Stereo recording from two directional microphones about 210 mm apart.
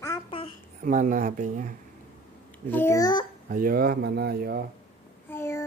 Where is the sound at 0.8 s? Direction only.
40° right (ahead or behind).